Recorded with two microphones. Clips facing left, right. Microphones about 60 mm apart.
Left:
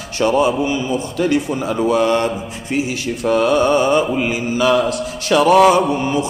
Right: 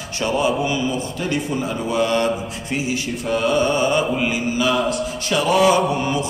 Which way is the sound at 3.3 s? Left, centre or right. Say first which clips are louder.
Left 5 dB; left.